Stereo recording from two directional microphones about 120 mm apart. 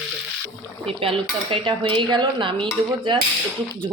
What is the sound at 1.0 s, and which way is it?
Cutlery, 45° right (ahead or behind).